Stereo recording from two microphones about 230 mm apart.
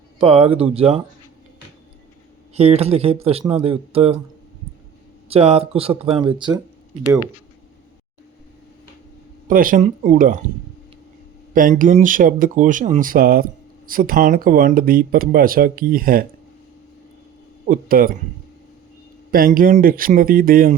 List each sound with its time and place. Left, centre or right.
0.2 s speech: right
2.6 s speech: right
5.3 s speech: right
9.5 s speech: right
11.5 s speech: right
17.7 s speech: right
19.3 s speech: right